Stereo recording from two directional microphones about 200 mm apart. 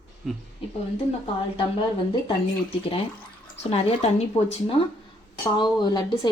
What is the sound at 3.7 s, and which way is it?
A woman's voice, 30° left (ahead or behind).